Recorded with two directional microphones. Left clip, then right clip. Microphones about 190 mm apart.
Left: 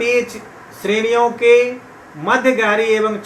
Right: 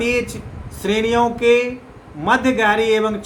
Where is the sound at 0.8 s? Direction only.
35° right (ahead or behind).